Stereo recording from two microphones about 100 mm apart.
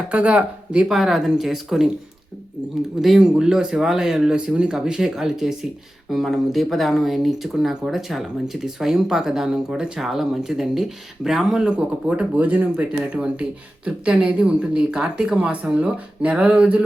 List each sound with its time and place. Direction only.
0.1 s speech: 10° right (ahead or behind)
3.0 s speech: 5° right (ahead or behind)